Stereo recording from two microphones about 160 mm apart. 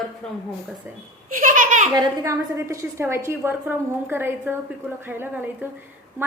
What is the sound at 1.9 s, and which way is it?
A woman's voice, 20° right (ahead or behind).